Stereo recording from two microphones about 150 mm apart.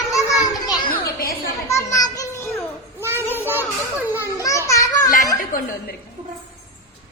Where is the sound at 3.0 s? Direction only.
15° right (ahead or behind).